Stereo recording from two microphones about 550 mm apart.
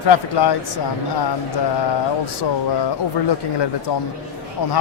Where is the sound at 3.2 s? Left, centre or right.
Left.